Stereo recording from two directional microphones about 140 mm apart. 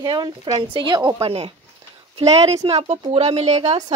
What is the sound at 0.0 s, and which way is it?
Speech, 30° right (ahead or behind).